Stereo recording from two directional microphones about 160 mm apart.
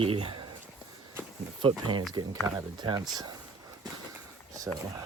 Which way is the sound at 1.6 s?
30° right (ahead or behind).